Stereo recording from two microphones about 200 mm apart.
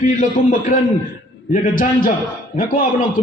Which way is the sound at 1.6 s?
45° left (ahead or behind).